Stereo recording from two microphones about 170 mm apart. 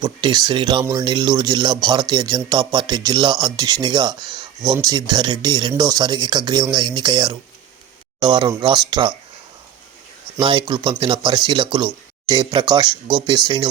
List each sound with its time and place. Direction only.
0.0 s speech: 25° right (ahead or behind)
10.4 s speech: 30° right (ahead or behind)